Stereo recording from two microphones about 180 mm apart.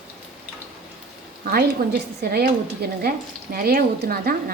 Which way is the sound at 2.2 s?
60° right (ahead or behind).